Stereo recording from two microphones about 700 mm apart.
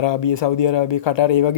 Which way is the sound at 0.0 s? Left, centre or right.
Left.